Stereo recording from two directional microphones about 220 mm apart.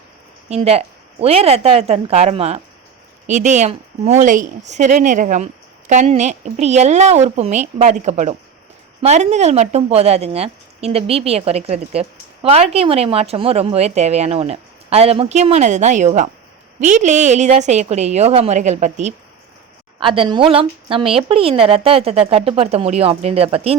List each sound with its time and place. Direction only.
0.5 s a woman's voice: 30° right (ahead or behind)